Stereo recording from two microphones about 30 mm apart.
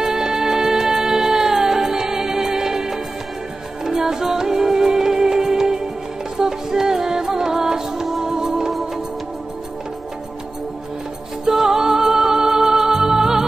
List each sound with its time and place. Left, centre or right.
0.0 s music: centre
11.4 s music: centre